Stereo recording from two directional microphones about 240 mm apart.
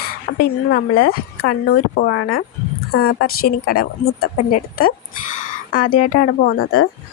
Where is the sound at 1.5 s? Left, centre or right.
Left.